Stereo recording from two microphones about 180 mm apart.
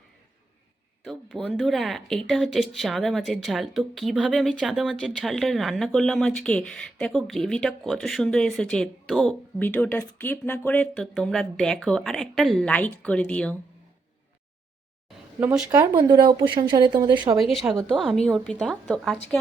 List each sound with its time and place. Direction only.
1.0 s speech: centre (ahead or behind)
10.9 s speech: centre (ahead or behind)
15.4 s speech: 10° right (ahead or behind)
17.5 s speech: centre (ahead or behind)